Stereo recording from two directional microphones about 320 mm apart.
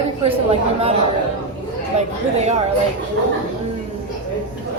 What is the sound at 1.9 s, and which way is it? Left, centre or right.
Speech, centre.